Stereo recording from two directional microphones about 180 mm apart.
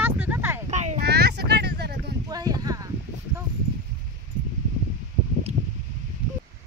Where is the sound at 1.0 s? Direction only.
65° right (ahead or behind).